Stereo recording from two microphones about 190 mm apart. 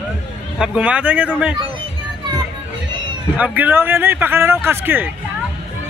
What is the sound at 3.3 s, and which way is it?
A man's voice, 10° right (ahead or behind).